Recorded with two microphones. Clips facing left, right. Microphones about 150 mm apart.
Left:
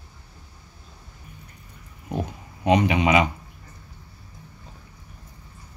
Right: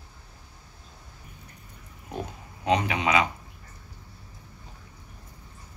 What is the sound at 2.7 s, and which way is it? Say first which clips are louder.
Speech: left 5 dB; 20° left (ahead or behind).